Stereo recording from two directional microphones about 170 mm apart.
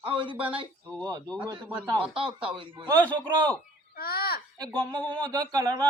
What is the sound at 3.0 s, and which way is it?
Speech, 10° left (ahead or behind).